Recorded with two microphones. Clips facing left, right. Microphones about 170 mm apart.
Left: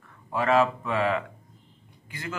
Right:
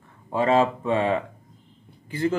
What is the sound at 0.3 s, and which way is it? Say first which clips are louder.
Speech: right 2 dB; 30° right (ahead or behind).